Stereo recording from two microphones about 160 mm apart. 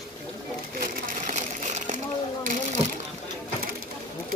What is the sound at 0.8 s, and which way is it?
Water, 50° right (ahead or behind).